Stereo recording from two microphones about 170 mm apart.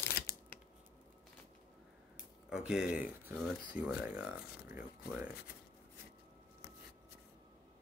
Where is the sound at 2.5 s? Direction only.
5° right (ahead or behind).